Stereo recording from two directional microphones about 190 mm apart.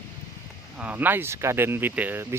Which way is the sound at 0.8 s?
10° right (ahead or behind).